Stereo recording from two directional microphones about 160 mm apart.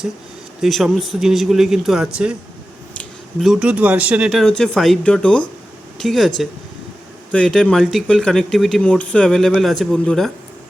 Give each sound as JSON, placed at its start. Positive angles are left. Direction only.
{"t": 0.6, "sound": "speech", "side_deg": 0}